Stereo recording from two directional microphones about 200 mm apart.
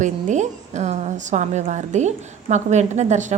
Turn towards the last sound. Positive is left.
turn(degrees=-35)  # may be behind; listen again after turning